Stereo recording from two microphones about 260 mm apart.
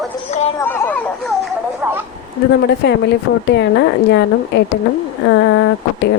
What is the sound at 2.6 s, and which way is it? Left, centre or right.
Speech, left.